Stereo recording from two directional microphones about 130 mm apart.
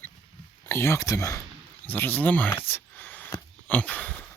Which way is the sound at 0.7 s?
20° left (ahead or behind).